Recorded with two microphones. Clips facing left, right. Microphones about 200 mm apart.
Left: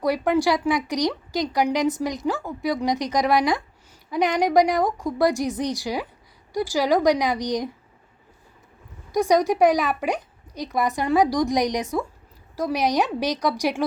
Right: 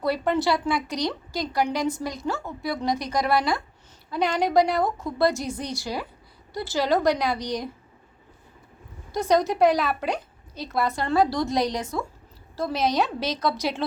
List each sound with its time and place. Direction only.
0.0 s a woman's voice: 15° left (ahead or behind)
9.1 s a woman's voice: 15° left (ahead or behind)